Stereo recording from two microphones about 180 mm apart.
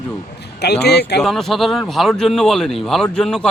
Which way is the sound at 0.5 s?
65° left (ahead or behind).